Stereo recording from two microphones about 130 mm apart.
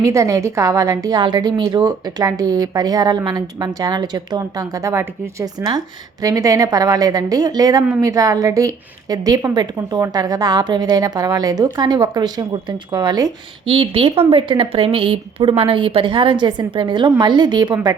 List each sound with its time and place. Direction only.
0.0 s a woman's voice: 25° right (ahead or behind)
13.7 s a woman's voice: 45° right (ahead or behind)